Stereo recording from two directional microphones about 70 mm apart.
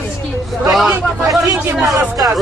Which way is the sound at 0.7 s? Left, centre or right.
Centre.